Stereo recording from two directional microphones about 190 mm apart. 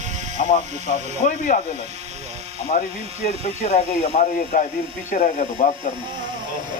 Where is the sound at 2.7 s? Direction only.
45° left (ahead or behind).